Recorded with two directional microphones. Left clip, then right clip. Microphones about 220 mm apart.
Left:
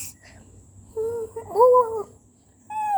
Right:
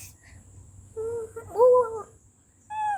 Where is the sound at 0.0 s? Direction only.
20° left (ahead or behind).